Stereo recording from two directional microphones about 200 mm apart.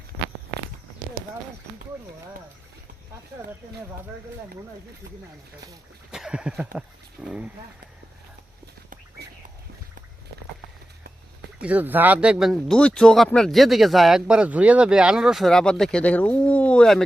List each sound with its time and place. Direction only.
6.1 s a sound: 5° right (ahead or behind)
6.7 s speech: 5° right (ahead or behind)
9.2 s bird: 55° right (ahead or behind)
11.6 s speech: 10° right (ahead or behind)